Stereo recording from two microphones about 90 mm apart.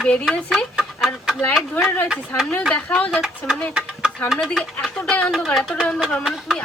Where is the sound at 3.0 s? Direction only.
15° left (ahead or behind).